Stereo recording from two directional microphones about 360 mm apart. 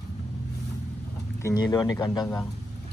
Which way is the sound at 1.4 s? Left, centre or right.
Centre.